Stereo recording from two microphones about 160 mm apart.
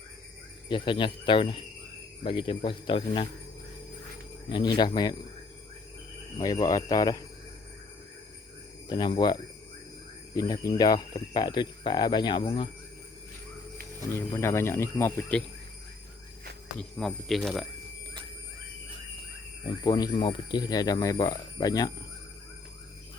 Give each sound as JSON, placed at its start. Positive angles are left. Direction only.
{"t": 0.7, "sound": "speech", "side_deg": 30}
{"t": 4.4, "sound": "speech", "side_deg": 30}
{"t": 6.4, "sound": "speech", "side_deg": 20}
{"t": 8.9, "sound": "speech", "side_deg": 25}
{"t": 14.1, "sound": "speech", "side_deg": 15}
{"t": 16.7, "sound": "speech", "side_deg": 5}
{"t": 19.6, "sound": "speech", "side_deg": 25}